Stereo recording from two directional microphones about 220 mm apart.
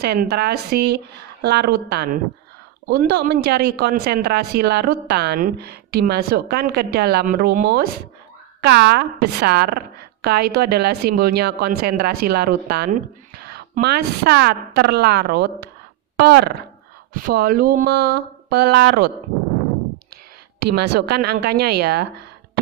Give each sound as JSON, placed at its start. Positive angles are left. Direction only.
{"t": 0.0, "sound": "speech", "side_deg": -45}
{"t": 20.7, "sound": "speech", "side_deg": -50}